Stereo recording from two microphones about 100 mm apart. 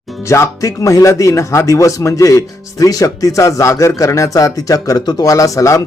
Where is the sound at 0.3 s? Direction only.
30° left (ahead or behind).